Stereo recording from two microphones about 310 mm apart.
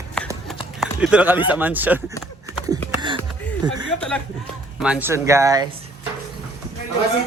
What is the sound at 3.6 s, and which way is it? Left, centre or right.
Speech, centre.